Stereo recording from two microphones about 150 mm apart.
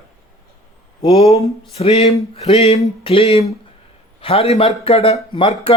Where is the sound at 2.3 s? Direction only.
40° left (ahead or behind).